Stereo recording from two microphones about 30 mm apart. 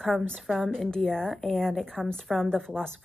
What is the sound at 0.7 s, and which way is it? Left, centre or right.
A woman's voice, left.